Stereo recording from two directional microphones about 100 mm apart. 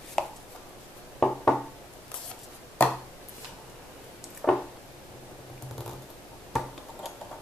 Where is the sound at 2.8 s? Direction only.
20° left (ahead or behind).